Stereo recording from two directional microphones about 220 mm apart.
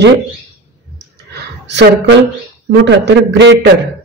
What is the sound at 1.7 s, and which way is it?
Speech, 50° right (ahead or behind).